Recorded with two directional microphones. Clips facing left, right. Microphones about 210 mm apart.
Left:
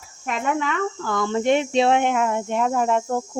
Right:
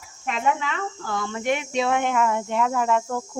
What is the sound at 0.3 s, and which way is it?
Speech, 45° left (ahead or behind).